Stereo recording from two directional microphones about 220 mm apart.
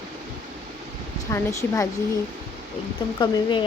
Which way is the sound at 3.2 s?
20° left (ahead or behind).